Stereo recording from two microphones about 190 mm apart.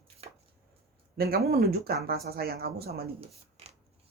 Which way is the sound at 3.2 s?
35° right (ahead or behind).